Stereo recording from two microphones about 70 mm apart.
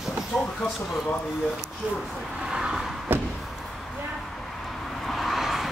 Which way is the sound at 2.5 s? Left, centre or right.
Centre.